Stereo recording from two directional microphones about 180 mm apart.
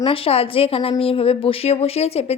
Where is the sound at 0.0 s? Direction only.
30° left (ahead or behind).